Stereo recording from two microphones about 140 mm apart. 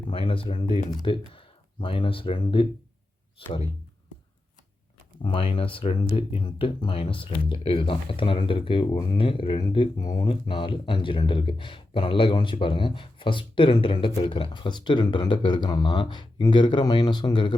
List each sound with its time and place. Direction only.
0.1 s speech: 40° left (ahead or behind)
5.2 s speech: 40° left (ahead or behind)